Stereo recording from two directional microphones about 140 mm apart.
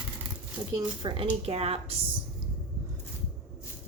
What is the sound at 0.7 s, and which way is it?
Speech, 35° right (ahead or behind).